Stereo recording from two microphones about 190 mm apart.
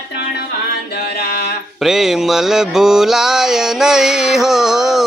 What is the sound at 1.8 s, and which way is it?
Mantra, centre (ahead or behind).